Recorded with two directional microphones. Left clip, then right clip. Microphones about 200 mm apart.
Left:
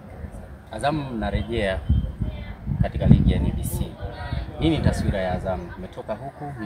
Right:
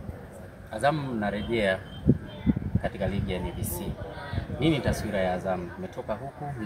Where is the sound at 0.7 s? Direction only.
20° left (ahead or behind).